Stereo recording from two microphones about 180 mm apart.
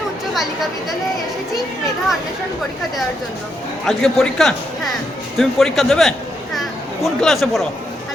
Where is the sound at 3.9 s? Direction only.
Centre (ahead or behind).